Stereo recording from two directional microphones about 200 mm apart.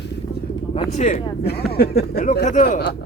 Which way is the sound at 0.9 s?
35° left (ahead or behind).